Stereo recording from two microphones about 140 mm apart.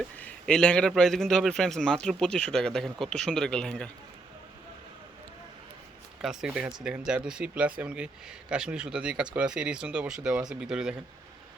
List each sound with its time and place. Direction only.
0.2 s a man's voice: 5° left (ahead or behind)
6.2 s a man's voice: 5° right (ahead or behind)